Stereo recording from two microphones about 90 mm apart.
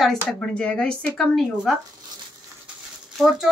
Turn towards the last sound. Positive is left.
turn(degrees=-5)  # may be behind; listen again after turning